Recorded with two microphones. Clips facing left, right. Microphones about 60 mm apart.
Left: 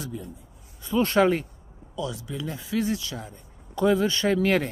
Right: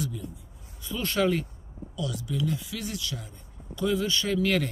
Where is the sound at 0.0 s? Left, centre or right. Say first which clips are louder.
Right 2 dB; left.